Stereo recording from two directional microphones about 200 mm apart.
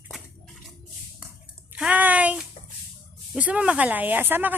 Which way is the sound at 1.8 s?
5° right (ahead or behind).